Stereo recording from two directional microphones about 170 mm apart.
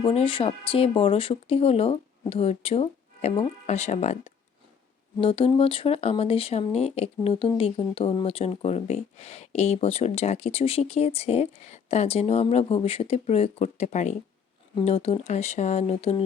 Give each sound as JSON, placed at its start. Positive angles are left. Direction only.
{"t": 0.0, "sound": "speech", "side_deg": 35}
{"t": 5.2, "sound": "speech", "side_deg": 30}